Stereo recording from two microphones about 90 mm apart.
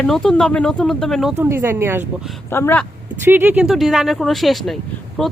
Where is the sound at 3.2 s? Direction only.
20° right (ahead or behind).